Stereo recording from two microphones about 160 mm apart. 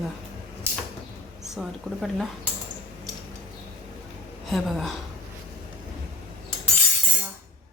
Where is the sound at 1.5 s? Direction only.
Centre (ahead or behind).